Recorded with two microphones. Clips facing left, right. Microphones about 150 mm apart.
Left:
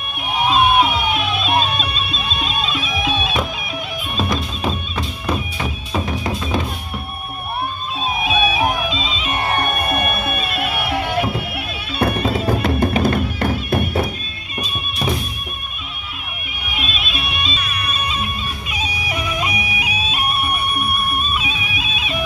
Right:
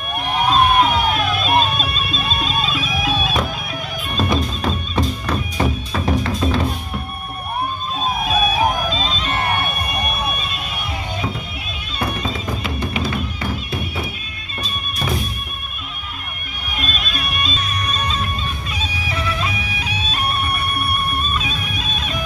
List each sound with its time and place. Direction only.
0.5 s music: 5° left (ahead or behind)
8.2 s music: centre (ahead or behind)
9.6 s music: 55° left (ahead or behind)
16.7 s bagpipes: 5° left (ahead or behind)
17.8 s music: 10° left (ahead or behind)